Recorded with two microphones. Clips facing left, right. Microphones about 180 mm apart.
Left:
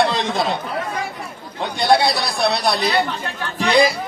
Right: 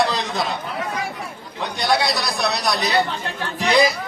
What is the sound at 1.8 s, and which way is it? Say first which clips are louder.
Speech: left 4 dB; 30° left (ahead or behind).